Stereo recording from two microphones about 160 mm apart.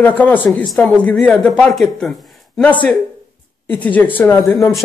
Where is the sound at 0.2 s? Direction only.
10° left (ahead or behind).